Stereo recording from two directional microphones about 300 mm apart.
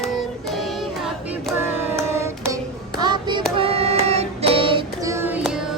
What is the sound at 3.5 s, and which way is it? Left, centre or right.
Child singing, centre.